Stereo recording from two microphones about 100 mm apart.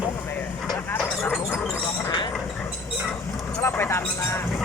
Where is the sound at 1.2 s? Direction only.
5° left (ahead or behind).